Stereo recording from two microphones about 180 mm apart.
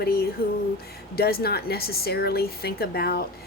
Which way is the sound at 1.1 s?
60° left (ahead or behind).